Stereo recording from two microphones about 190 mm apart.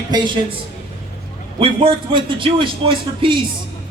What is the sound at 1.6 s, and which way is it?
A man's voice, 25° right (ahead or behind).